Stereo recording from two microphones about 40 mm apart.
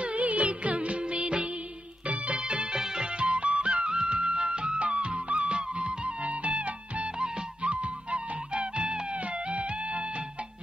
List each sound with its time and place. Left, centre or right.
0.0 s music: right
2.0 s music: right
2.4 s music: right